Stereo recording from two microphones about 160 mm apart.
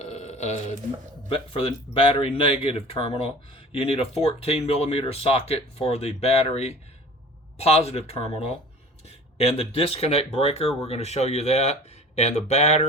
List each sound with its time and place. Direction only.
0.0 s telephone: 40° left (ahead or behind)
1.3 s speech: 35° left (ahead or behind)